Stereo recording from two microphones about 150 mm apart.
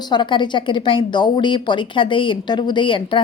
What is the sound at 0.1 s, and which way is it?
A woman's voice, 30° left (ahead or behind).